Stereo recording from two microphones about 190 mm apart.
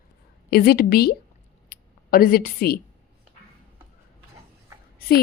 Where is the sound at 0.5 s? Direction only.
55° left (ahead or behind).